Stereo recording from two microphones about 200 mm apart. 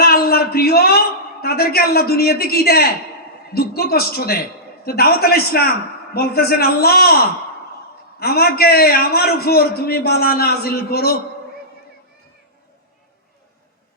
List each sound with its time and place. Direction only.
0.0 s a man's voice: 50° left (ahead or behind)
8.2 s a man's voice: 50° left (ahead or behind)